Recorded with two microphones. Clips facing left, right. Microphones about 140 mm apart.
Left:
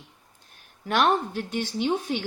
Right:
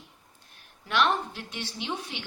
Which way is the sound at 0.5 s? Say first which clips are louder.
Left 3 dB; 45° left (ahead or behind).